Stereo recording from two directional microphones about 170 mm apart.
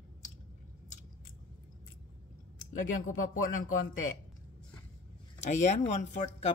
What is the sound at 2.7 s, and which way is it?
Speech, 50° left (ahead or behind).